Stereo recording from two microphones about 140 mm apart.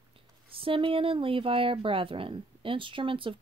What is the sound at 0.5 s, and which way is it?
Speech, 40° right (ahead or behind).